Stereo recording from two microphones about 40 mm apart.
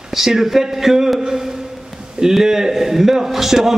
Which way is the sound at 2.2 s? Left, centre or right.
Centre.